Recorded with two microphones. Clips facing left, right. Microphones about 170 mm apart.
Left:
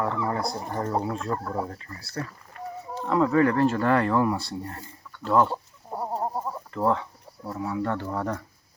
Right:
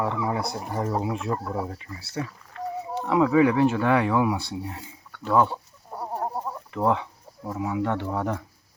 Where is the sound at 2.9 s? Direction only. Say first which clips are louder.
Even; 20° right (ahead or behind).